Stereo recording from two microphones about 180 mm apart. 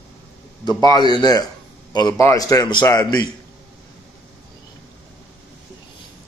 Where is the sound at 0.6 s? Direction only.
25° left (ahead or behind).